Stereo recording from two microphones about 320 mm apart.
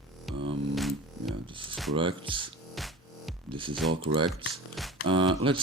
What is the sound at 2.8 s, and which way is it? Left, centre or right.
Music, centre.